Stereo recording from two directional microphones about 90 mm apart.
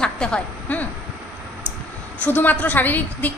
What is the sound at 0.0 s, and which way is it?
Speech, 10° left (ahead or behind).